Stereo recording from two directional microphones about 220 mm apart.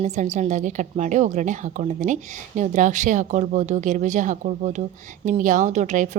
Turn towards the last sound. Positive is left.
turn(degrees=-35)  # may be behind; listen again after turning